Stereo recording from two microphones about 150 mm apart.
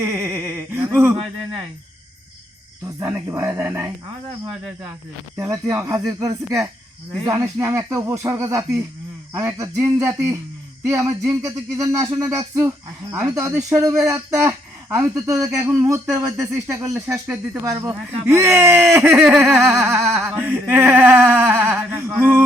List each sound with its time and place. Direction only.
0.0 s a sound: 20° right (ahead or behind)
2.8 s speech: 15° right (ahead or behind)
5.5 s speech: 20° right (ahead or behind)